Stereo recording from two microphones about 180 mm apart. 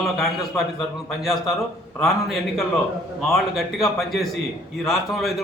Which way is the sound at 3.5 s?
Centre (ahead or behind).